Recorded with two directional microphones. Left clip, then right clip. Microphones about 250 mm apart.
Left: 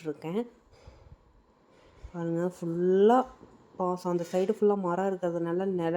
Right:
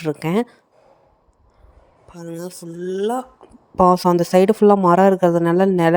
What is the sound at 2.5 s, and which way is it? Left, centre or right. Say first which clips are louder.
Speech: left 1 dB; right.